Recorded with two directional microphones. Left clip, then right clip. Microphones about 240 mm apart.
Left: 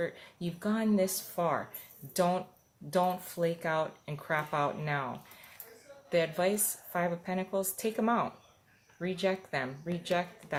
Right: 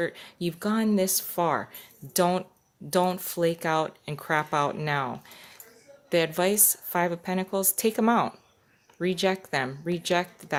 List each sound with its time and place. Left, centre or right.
0.0 s speech: right